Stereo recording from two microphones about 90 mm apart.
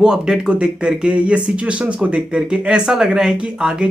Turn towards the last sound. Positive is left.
turn(degrees=-10)  # may be behind; listen again after turning